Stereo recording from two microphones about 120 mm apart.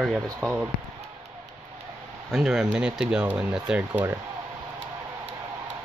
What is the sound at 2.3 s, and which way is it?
Speech, 5° right (ahead or behind).